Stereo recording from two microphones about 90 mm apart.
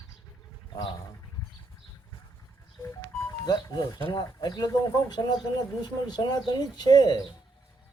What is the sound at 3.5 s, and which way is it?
Speech, 45° left (ahead or behind).